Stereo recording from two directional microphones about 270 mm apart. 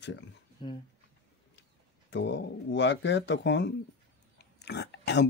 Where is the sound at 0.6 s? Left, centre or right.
Centre.